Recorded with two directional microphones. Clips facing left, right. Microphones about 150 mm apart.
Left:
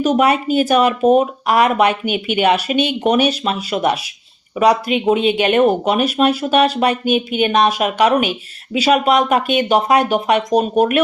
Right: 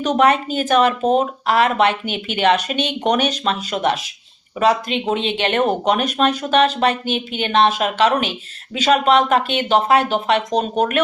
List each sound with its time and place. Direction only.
0.0 s speech: 10° left (ahead or behind)